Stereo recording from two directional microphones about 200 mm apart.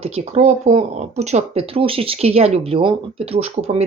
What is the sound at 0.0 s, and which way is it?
Speech, 30° right (ahead or behind).